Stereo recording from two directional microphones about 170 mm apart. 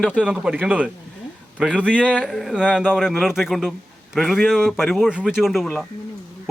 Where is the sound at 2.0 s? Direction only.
5° right (ahead or behind).